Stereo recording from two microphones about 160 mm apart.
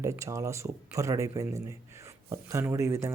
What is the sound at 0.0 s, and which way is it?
Speech, 20° right (ahead or behind).